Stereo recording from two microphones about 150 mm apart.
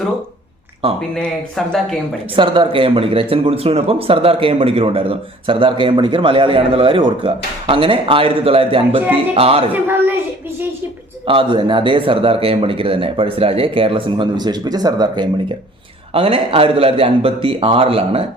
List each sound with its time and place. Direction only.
1.1 s speech: centre (ahead or behind)
2.3 s speech: 35° right (ahead or behind)
9.7 s a woman's voice: 15° right (ahead or behind)
11.3 s speech: 35° right (ahead or behind)
16.1 s speech: 40° right (ahead or behind)